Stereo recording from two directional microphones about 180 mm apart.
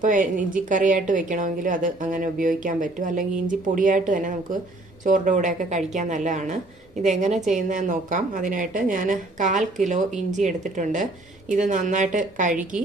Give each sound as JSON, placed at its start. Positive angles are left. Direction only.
{"t": 0.0, "sound": "a woman's voice", "side_deg": -45}